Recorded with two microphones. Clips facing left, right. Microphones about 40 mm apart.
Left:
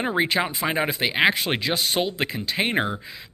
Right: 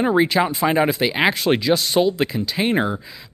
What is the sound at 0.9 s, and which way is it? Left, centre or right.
Speech, centre.